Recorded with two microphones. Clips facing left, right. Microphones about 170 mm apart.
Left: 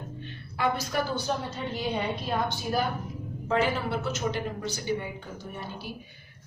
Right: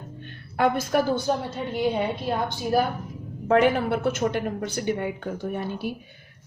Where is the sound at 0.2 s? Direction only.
55° right (ahead or behind).